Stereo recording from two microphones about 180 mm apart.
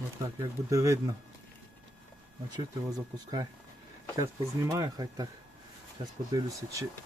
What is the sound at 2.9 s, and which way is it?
Speech, 20° right (ahead or behind).